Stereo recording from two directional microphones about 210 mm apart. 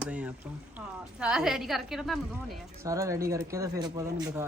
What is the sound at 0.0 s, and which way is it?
A woman's voice, 5° right (ahead or behind).